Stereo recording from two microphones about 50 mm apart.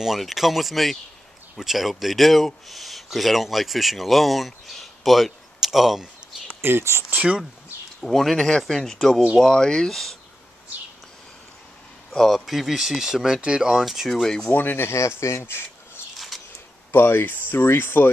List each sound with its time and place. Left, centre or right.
0.0 s speech: centre
6.6 s speech: right
8.0 s speech: centre
12.1 s speech: centre
14.5 s speech: left
14.9 s speech: left
16.3 s a sound: centre
16.9 s speech: left